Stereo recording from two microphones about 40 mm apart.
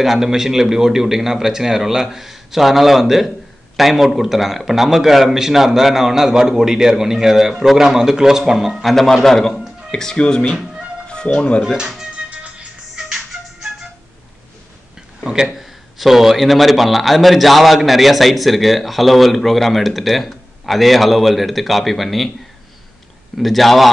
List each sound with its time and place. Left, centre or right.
0.0 s a man's voice: centre
8.8 s speech: centre; by 11.6 s left
11.6 s speech: centre
12.3 s music: right
12.9 s music: centre
15.4 s a man's voice: centre
23.3 s a man's voice: centre